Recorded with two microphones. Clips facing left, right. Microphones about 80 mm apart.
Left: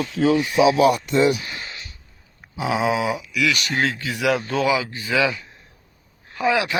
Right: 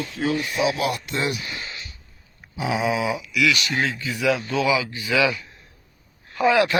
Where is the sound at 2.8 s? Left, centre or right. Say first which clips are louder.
Left 2 dB; left.